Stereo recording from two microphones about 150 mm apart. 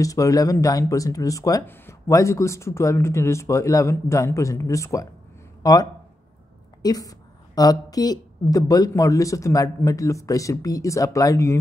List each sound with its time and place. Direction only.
0.0 s speech: 20° left (ahead or behind)